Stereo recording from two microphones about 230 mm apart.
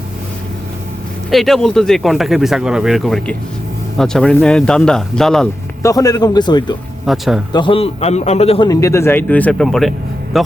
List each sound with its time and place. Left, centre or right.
1.3 s speech: centre
5.8 s a man's voice: centre
7.0 s speech: centre
7.5 s a man's voice: left; by 10.5 s centre